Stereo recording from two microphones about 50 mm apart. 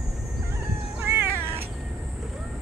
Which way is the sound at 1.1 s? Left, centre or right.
Right.